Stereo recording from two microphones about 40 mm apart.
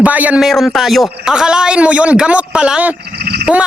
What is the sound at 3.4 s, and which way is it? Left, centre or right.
Frog, right.